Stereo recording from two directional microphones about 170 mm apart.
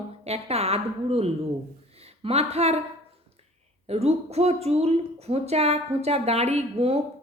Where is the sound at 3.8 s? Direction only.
35° right (ahead or behind).